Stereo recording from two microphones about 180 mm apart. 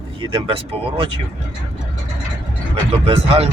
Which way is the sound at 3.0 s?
35° right (ahead or behind).